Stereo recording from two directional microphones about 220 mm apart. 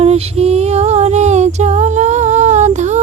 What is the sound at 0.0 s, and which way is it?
Music, 30° right (ahead or behind).